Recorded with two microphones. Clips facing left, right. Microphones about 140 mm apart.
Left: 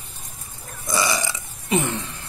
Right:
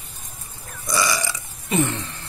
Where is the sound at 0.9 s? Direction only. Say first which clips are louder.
Even; 25° left (ahead or behind).